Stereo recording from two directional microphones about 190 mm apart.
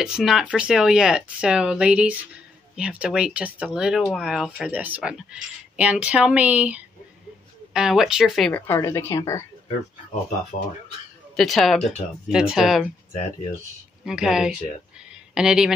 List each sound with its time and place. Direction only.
0.0 s speech: 5° right (ahead or behind); by 9.4 s 15° left (ahead or behind)
11.3 s speech: centre (ahead or behind)
14.0 s speech: 5° right (ahead or behind)